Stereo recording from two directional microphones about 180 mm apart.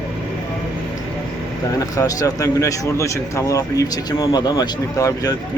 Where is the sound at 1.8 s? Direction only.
20° left (ahead or behind).